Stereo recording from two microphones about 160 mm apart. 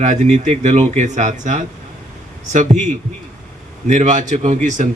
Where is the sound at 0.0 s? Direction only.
50° right (ahead or behind).